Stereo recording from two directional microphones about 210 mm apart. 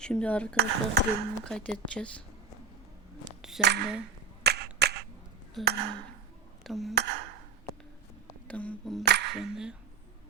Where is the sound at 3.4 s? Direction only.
Centre (ahead or behind).